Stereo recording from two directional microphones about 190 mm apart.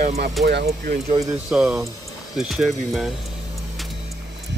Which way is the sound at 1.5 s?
5° right (ahead or behind).